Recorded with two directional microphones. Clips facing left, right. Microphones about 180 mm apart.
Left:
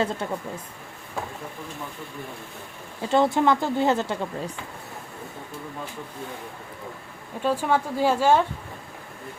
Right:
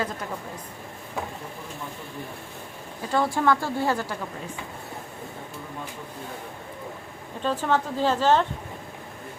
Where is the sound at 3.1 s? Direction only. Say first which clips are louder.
Left 3 dB; 20° left (ahead or behind).